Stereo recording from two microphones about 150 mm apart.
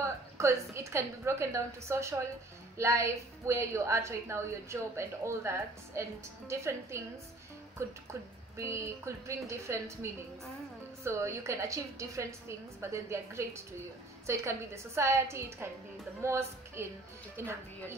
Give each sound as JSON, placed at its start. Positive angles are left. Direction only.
{"t": 0.0, "sound": "a woman's voice", "side_deg": -20}
{"t": 8.1, "sound": "a woman's voice", "side_deg": -20}
{"t": 11.1, "sound": "a woman's voice", "side_deg": -20}